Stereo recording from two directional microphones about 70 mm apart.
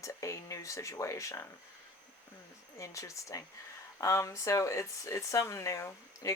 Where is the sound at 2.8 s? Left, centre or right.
Left.